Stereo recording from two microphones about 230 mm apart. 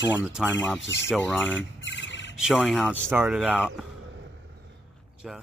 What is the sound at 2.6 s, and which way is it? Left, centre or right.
Speech, centre.